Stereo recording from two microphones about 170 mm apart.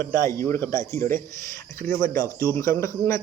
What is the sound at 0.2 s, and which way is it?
Speech, 15° left (ahead or behind).